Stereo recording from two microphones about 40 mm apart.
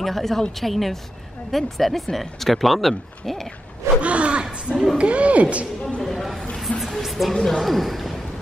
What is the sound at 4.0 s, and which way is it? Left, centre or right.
Gasp, right.